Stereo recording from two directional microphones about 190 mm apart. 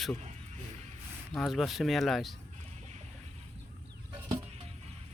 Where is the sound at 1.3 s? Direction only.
Centre (ahead or behind).